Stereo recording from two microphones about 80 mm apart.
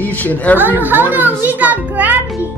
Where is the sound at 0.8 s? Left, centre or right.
Right.